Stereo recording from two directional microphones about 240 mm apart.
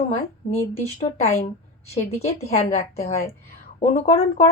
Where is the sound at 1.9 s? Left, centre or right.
Left.